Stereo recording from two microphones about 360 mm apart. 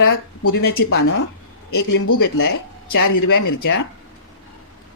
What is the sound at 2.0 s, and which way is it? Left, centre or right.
Speech, left.